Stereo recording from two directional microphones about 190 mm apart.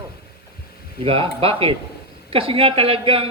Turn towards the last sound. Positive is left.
turn(degrees=-30)  # may be behind; listen again after turning